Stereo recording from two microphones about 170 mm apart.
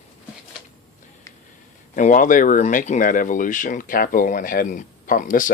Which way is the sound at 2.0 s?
50° left (ahead or behind).